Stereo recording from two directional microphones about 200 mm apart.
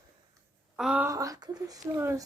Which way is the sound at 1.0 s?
15° right (ahead or behind).